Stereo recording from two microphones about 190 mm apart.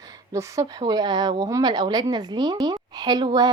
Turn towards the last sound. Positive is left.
turn(degrees=-20)  # may be behind; listen again after turning